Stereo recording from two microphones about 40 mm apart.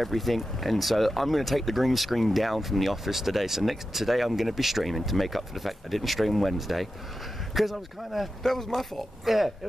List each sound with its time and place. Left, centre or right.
0.0 s speech: centre
8.5 s speech: centre